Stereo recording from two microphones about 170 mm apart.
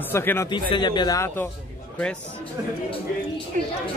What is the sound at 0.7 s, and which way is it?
Speech, 25° left (ahead or behind).